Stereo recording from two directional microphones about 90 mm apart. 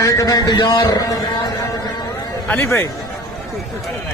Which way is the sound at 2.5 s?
30° left (ahead or behind).